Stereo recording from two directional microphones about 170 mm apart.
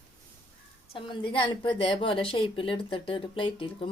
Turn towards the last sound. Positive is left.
turn(degrees=30)  # may be behind; listen again after turning